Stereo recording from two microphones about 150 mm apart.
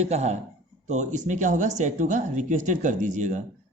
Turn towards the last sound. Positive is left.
turn(degrees=-55)  # may be behind; listen again after turning